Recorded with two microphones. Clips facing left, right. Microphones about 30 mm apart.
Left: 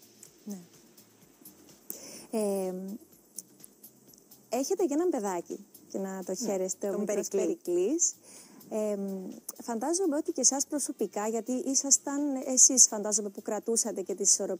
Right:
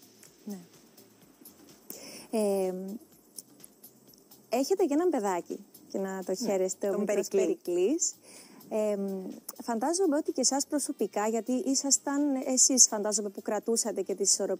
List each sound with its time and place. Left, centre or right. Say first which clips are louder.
0.5 s speech: right 1 dB; right
1.9 s a sound: right 1 dB; right
2.2 s speech: right 2 dB; right
2.6 s speech: right 3 dB; centre
4.5 s speech: right 2 dB; right